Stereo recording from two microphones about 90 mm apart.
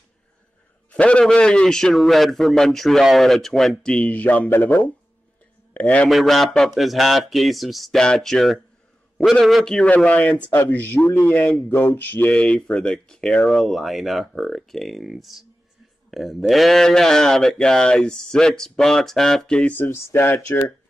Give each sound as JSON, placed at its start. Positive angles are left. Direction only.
{"t": 0.9, "sound": "a man's voice", "side_deg": 15}
{"t": 5.7, "sound": "a man's voice", "side_deg": 20}
{"t": 6.0, "sound": "a man's voice", "side_deg": 0}
{"t": 9.8, "sound": "speech", "side_deg": 15}
{"t": 11.7, "sound": "a sound", "side_deg": 25}
{"t": 12.3, "sound": "a man's voice", "side_deg": 10}